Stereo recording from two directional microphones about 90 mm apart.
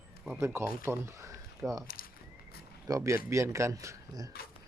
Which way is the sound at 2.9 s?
35° right (ahead or behind).